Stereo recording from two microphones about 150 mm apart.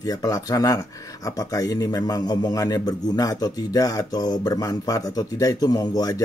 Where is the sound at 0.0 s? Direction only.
25° left (ahead or behind).